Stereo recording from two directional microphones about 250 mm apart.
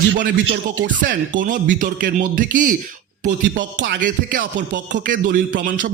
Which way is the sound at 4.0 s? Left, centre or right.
Right.